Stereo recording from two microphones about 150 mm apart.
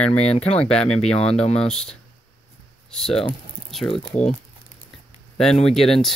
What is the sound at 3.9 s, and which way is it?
Speech, 50° left (ahead or behind).